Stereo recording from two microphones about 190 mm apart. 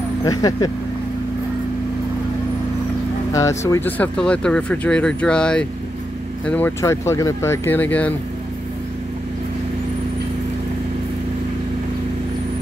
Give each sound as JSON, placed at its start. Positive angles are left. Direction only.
{"t": 0.2, "sound": "speech", "side_deg": 20}
{"t": 3.3, "sound": "speech", "side_deg": 15}